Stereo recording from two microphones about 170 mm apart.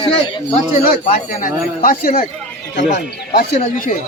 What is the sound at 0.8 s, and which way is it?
Speech, 50° left (ahead or behind).